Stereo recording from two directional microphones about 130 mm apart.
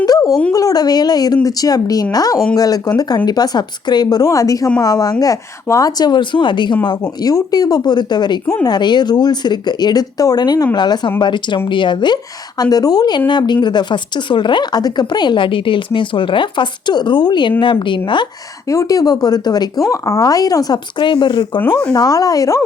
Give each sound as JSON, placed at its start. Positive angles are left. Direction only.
{"t": 0.0, "sound": "dog", "side_deg": 30}
{"t": 0.5, "sound": "a woman's voice", "side_deg": 30}
{"t": 18.7, "sound": "a woman's voice", "side_deg": 25}